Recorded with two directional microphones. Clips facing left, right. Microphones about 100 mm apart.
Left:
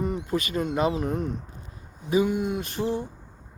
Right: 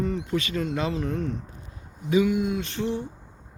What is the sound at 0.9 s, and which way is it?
Speech, 15° left (ahead or behind).